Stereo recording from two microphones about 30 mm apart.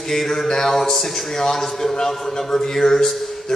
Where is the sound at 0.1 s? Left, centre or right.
Centre.